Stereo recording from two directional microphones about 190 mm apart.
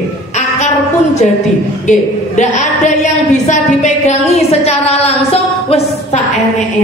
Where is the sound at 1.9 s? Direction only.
40° left (ahead or behind).